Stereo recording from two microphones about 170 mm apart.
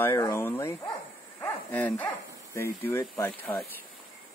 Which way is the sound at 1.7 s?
10° left (ahead or behind).